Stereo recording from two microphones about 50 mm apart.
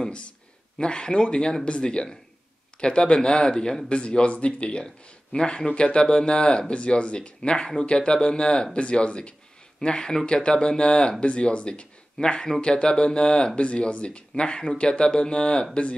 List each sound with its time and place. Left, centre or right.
0.7 s speech: centre